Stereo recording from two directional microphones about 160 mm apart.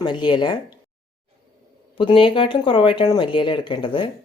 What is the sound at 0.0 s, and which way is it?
Speech, 30° left (ahead or behind).